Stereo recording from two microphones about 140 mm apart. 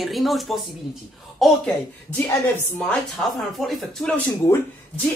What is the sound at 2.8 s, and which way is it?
A woman's voice, 5° left (ahead or behind).